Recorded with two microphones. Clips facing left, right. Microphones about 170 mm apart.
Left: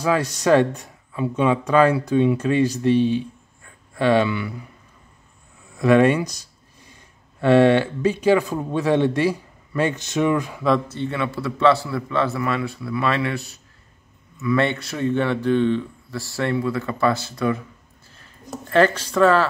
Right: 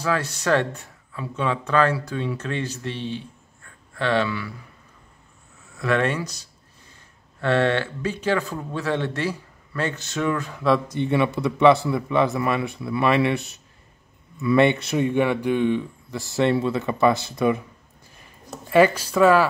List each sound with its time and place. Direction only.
0.0 s speech: 15° left (ahead or behind)
5.8 s speech: 15° left (ahead or behind)
10.9 s speech: 20° right (ahead or behind)
18.7 s speech: 10° right (ahead or behind)